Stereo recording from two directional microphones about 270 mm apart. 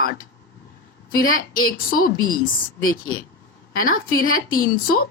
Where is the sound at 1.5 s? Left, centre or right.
Left.